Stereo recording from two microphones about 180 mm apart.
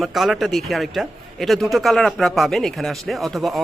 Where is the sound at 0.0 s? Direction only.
Centre (ahead or behind).